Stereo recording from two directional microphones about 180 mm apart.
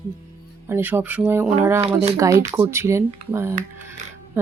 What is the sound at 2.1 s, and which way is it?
Speech, 15° right (ahead or behind).